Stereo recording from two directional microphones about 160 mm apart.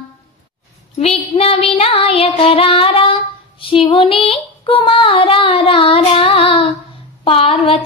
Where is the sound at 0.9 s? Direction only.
40° left (ahead or behind).